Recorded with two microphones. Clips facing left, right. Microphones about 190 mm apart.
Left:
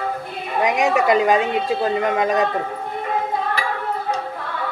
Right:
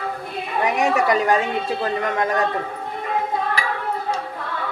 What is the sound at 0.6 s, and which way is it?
A woman's voice, 20° left (ahead or behind).